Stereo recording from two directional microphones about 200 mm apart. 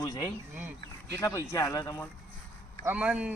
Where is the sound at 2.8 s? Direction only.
5° right (ahead or behind).